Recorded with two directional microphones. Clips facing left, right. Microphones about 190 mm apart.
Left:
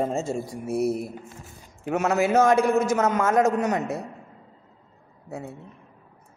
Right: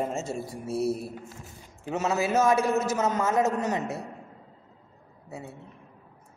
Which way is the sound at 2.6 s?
15° left (ahead or behind).